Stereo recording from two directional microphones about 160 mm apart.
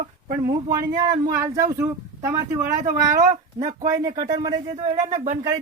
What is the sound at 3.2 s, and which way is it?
Speech, 55° right (ahead or behind).